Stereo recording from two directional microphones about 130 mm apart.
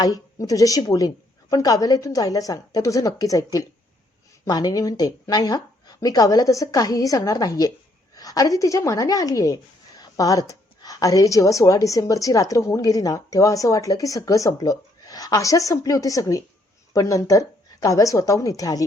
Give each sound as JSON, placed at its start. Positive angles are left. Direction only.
{"t": 0.0, "sound": "a woman's voice", "side_deg": 25}